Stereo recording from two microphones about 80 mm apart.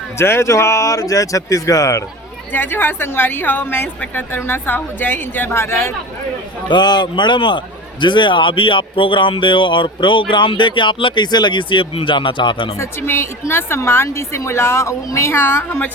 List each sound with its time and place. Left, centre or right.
0.2 s speech: left
2.5 s a woman's voice: left
6.7 s speech: left
12.8 s a woman's voice: left